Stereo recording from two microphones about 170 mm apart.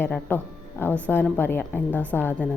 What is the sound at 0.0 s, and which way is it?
A woman's voice, 10° left (ahead or behind).